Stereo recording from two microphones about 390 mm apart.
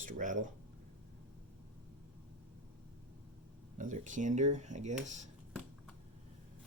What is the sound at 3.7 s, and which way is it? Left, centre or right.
Speech, centre.